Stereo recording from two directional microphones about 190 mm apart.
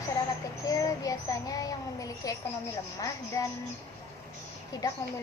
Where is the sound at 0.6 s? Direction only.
20° left (ahead or behind).